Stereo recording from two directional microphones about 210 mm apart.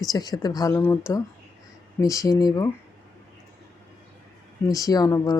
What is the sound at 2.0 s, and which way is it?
Speech, 15° left (ahead or behind).